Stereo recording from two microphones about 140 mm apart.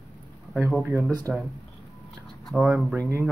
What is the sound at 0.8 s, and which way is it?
Speech, 15° right (ahead or behind).